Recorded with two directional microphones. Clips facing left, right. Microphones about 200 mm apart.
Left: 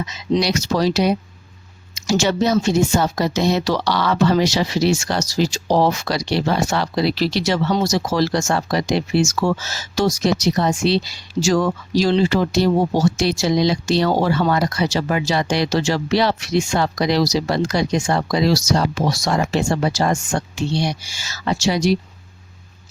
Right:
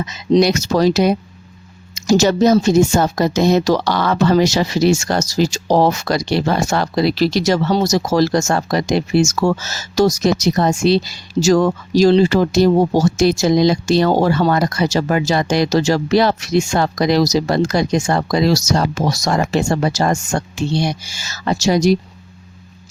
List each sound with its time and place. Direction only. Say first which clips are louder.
0.3 s speech: right 6 dB; 45° right (ahead or behind)